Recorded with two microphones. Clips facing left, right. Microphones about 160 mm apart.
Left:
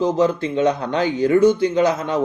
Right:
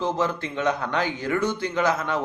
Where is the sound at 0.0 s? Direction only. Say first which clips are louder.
Left 7 dB; 15° left (ahead or behind).